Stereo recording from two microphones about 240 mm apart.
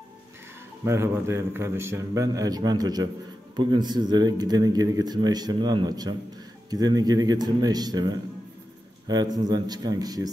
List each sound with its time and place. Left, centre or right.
0.8 s speech: centre